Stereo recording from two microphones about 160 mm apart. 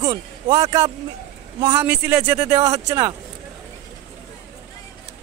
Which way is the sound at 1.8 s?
10° right (ahead or behind).